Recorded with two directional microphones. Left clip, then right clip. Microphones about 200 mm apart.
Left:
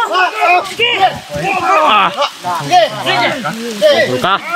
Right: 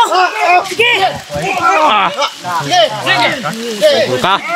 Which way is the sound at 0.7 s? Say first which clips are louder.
Right 2 dB; 45° right (ahead or behind).